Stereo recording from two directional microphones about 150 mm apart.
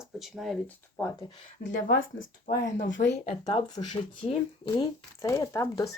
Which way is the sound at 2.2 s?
60° left (ahead or behind).